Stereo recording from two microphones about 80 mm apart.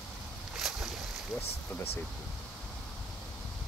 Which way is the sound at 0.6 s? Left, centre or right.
Centre.